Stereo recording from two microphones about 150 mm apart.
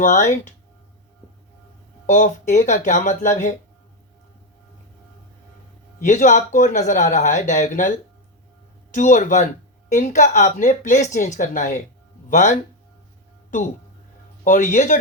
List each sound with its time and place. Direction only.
0.0 s speech: 55° left (ahead or behind)
2.0 s speech: 55° left (ahead or behind)
6.1 s speech: 55° left (ahead or behind)
14.4 s speech: 60° left (ahead or behind)